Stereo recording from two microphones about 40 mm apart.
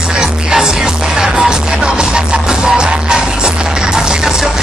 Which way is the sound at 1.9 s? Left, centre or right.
Right.